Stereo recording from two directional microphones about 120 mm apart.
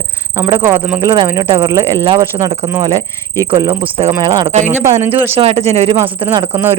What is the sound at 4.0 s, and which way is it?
Speech, 35° right (ahead or behind).